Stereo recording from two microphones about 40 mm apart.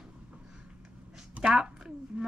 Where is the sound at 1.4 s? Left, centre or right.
Centre.